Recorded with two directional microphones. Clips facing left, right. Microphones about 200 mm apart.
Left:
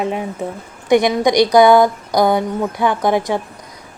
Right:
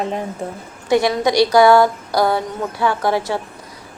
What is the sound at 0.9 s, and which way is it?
A woman's voice, 15° left (ahead or behind).